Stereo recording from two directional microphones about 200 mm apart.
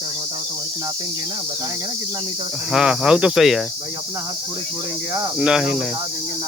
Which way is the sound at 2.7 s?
5° right (ahead or behind).